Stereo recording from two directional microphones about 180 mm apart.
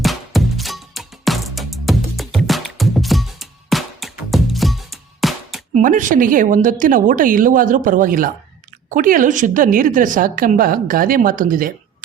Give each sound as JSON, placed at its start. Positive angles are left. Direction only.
{"t": 0.0, "sound": "music", "side_deg": 0}
{"t": 5.7, "sound": "a woman's voice", "side_deg": -45}